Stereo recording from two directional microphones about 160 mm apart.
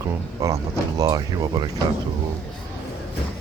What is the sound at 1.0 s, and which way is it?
Speech, 25° right (ahead or behind).